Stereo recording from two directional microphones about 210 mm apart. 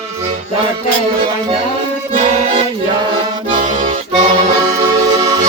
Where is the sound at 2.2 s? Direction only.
30° right (ahead or behind).